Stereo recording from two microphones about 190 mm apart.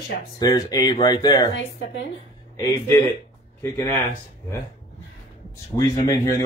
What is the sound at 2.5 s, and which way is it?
Speech, 20° left (ahead or behind).